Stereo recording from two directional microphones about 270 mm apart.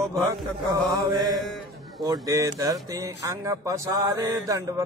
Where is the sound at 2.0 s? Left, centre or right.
Centre.